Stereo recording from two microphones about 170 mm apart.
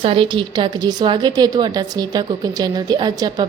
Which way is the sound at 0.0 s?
30° right (ahead or behind).